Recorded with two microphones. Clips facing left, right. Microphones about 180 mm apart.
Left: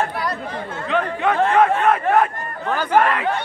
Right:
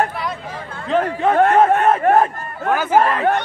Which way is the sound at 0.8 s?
35° right (ahead or behind).